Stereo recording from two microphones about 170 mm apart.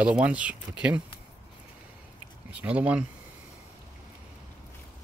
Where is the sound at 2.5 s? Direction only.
10° right (ahead or behind).